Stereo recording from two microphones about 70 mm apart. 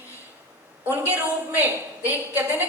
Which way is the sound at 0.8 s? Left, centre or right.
Right.